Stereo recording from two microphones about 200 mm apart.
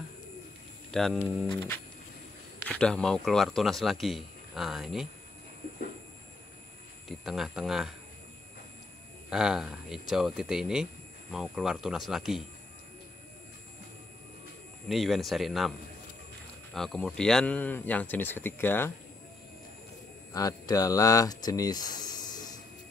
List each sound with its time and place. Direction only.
0.9 s speech: centre (ahead or behind)
2.7 s speech: 5° left (ahead or behind)
7.1 s speech: centre (ahead or behind)
9.3 s speech: centre (ahead or behind)
14.9 s speech: centre (ahead or behind)
16.7 s speech: centre (ahead or behind)
20.3 s speech: 20° left (ahead or behind)